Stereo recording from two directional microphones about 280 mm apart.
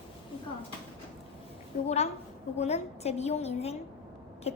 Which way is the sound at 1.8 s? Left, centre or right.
Left.